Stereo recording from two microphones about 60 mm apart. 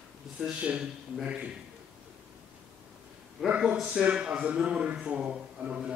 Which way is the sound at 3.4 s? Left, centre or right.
Centre.